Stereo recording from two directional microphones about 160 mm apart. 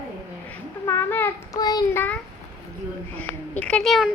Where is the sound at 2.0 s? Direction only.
10° left (ahead or behind).